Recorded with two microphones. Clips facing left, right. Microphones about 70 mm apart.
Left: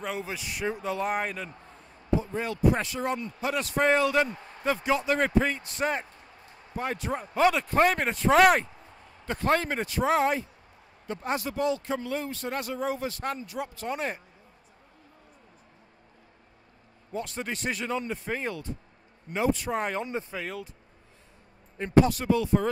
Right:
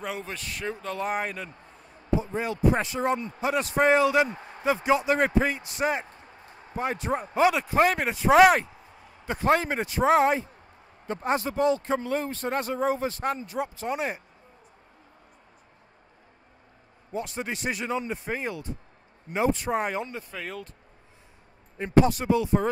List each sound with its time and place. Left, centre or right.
0.0 s a man's voice: centre
0.9 s speech: centre
2.1 s a man's voice: centre
13.2 s speech: centre
17.1 s speech: centre
19.3 s speech: right
19.8 s speech: centre
20.1 s speech: left
20.3 s speech: centre
22.0 s speech: right